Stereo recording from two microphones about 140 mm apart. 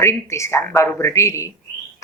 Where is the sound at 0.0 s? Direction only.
20° left (ahead or behind).